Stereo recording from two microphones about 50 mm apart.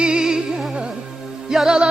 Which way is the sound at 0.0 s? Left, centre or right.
Centre.